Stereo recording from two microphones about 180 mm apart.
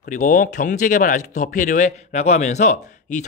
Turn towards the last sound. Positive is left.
turn(degrees=40)  # may be behind; listen again after turning